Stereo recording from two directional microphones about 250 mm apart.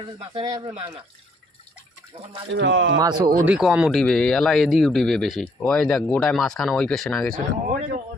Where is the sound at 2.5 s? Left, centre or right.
Right.